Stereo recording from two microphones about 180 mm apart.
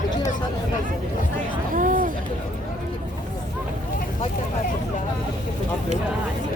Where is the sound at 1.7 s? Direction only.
50° right (ahead or behind).